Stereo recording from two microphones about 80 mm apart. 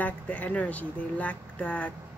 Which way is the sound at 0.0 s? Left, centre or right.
Centre.